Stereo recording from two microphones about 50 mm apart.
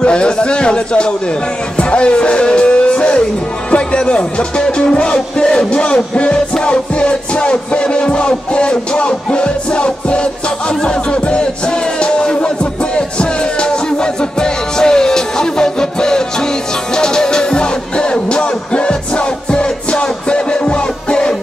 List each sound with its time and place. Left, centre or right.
0.0 s a man's voice: left
1.8 s music: left
3.7 s speech: left
5.1 s music: centre